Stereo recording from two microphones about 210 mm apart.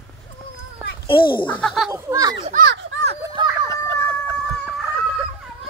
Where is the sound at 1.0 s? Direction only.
25° left (ahead or behind).